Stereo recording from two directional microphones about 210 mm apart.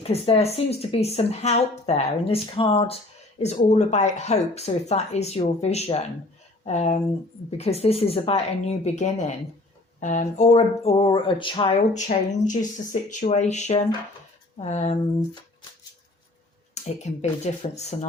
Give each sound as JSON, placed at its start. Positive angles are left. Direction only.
{"t": 0.0, "sound": "a woman's voice", "side_deg": 30}
{"t": 11.9, "sound": "speech", "side_deg": 35}
{"t": 16.7, "sound": "speech", "side_deg": 30}